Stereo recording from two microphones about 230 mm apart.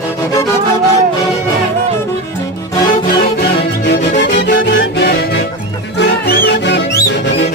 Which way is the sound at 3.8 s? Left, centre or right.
Left.